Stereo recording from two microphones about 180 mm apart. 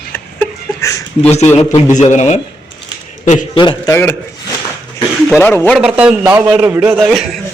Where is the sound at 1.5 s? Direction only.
40° left (ahead or behind).